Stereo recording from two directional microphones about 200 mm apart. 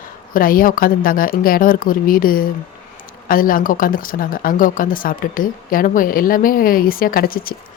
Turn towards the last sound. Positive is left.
turn(degrees=45)  # may be behind; listen again after turning